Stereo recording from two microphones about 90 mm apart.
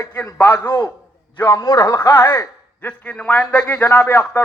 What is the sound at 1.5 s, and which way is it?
Speech, 40° left (ahead or behind).